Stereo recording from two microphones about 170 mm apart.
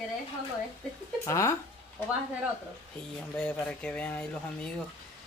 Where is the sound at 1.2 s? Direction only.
20° left (ahead or behind).